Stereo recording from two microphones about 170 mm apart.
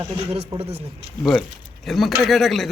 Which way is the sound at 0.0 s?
35° right (ahead or behind).